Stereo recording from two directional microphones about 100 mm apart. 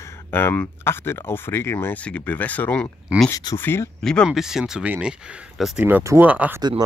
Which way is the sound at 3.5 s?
25° left (ahead or behind).